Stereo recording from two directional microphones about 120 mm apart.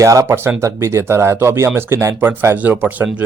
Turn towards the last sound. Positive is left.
turn(degrees=-10)  # may be behind; listen again after turning